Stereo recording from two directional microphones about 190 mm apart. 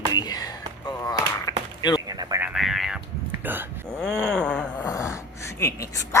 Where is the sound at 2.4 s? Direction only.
5° right (ahead or behind).